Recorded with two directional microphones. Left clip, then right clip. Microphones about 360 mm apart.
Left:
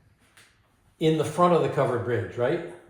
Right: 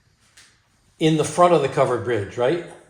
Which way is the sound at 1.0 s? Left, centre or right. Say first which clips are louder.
Right 5 dB; right.